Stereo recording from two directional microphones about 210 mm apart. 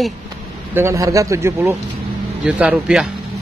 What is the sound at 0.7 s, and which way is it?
A man's voice, 15° right (ahead or behind).